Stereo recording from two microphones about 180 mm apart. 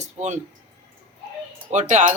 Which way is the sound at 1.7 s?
40° right (ahead or behind).